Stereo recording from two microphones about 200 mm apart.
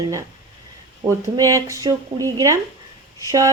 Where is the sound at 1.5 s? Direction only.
15° right (ahead or behind).